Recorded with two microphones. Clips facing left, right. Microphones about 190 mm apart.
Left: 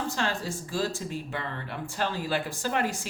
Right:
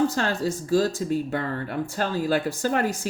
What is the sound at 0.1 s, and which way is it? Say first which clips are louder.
Speech: right 5 dB; 40° right (ahead or behind).